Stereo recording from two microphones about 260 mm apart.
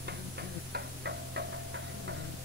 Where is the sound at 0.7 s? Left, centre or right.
Right.